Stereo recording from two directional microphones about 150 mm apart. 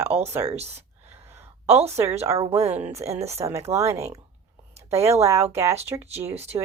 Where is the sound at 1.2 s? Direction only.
15° right (ahead or behind).